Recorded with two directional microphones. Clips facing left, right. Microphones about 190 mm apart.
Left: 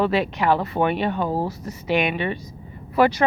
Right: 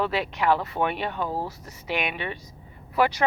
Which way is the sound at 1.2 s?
20° left (ahead or behind).